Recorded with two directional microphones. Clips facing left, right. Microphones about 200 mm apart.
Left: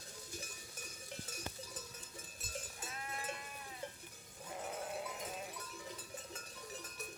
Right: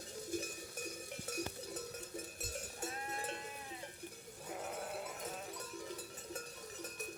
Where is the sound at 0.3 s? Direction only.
55° right (ahead or behind).